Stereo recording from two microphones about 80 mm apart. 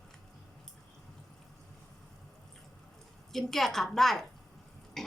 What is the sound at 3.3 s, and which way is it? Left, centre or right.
Speech, centre.